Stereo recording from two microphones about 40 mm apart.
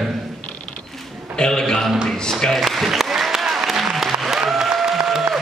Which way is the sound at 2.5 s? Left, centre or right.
Centre.